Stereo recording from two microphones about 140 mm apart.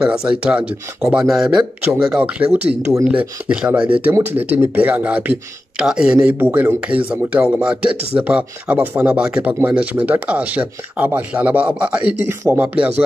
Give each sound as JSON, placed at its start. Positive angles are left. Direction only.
{"t": 0.3, "sound": "speech", "side_deg": -5}
{"t": 3.7, "sound": "speech", "side_deg": -35}
{"t": 4.0, "sound": "speech", "side_deg": -15}